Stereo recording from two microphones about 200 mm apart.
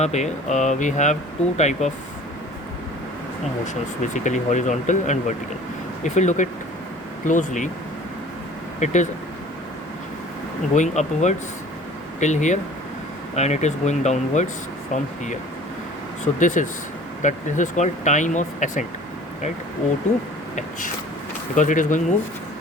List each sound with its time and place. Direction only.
0.0 s speech: 35° left (ahead or behind)
4.0 s speech: 40° left (ahead or behind)
8.8 s speech: 35° left (ahead or behind)
10.8 s speech: 35° left (ahead or behind)
16.4 s speech: 40° left (ahead or behind)
21.5 s speech: 40° left (ahead or behind)